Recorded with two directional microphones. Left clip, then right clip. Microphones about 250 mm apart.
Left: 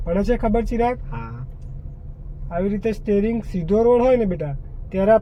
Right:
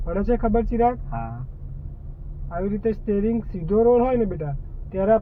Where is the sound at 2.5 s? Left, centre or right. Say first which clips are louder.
Left 2 dB; left.